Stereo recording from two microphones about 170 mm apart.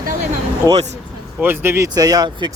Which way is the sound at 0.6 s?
15° right (ahead or behind).